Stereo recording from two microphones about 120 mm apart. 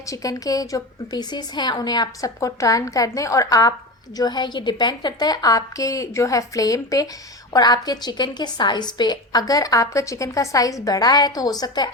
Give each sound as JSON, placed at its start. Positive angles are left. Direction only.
{"t": 0.0, "sound": "a woman's voice", "side_deg": 30}